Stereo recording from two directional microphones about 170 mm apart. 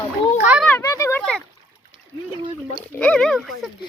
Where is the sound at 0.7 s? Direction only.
15° left (ahead or behind).